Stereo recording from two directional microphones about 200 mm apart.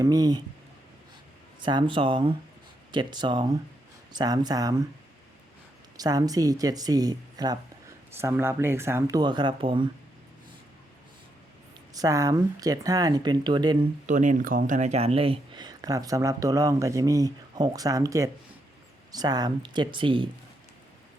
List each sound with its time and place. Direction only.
0.0 s speech: 20° right (ahead or behind)
1.6 s speech: 25° right (ahead or behind)
6.0 s speech: 20° right (ahead or behind)
11.9 s speech: 15° right (ahead or behind)
14.1 s speech: 40° right (ahead or behind)